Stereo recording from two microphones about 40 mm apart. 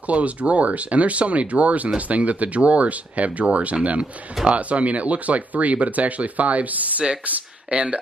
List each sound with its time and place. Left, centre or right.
0.0 s speech: right